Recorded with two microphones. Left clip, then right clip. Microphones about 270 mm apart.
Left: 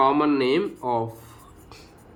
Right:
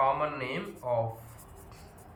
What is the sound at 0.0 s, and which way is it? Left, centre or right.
Speech, left.